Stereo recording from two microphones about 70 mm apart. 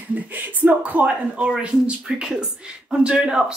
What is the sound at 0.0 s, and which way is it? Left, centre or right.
Speech, right.